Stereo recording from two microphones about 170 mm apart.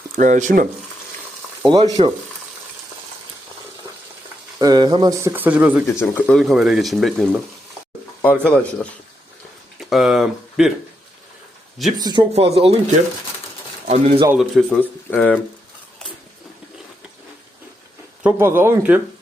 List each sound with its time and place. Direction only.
0.2 s speech: 45° right (ahead or behind)
1.6 s speech: 25° right (ahead or behind)
4.6 s speech: 25° right (ahead or behind)
5.3 s speech: 10° right (ahead or behind)
6.0 s speech: 5° left (ahead or behind)
9.9 s speech: centre (ahead or behind)
11.9 s speech: 25° right (ahead or behind)
12.3 s speech: 35° right (ahead or behind)
13.8 s speech: 40° right (ahead or behind)
14.3 s speech: 5° left (ahead or behind)
18.2 s speech: 15° right (ahead or behind)